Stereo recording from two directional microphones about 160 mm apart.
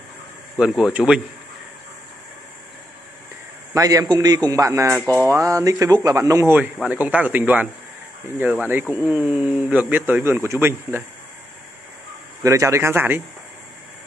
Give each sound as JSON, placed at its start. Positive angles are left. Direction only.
{"t": 0.6, "sound": "speech", "side_deg": -5}
{"t": 3.7, "sound": "a man's voice", "side_deg": -20}
{"t": 12.4, "sound": "speech", "side_deg": -20}